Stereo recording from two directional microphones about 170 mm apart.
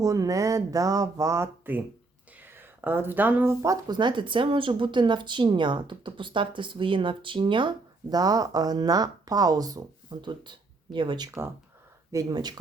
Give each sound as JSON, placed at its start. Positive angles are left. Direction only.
{"t": 0.0, "sound": "speech", "side_deg": -20}